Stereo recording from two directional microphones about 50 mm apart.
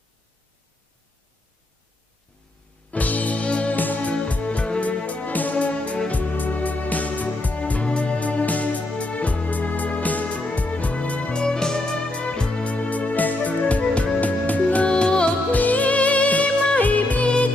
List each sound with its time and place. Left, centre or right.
2.9 s music: left
15.5 s music: left